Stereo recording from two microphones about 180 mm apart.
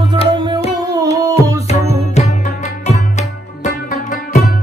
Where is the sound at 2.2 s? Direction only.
40° left (ahead or behind).